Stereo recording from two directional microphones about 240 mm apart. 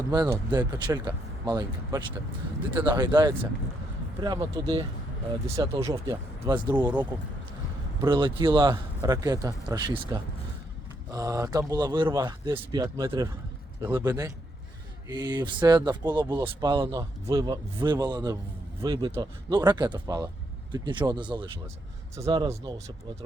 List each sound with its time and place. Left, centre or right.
0.1 s speech: centre
11.1 s speech: centre